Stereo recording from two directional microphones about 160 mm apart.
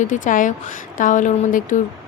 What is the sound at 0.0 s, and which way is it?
Speech, 55° left (ahead or behind).